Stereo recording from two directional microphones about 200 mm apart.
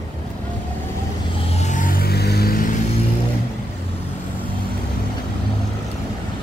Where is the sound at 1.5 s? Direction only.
35° left (ahead or behind).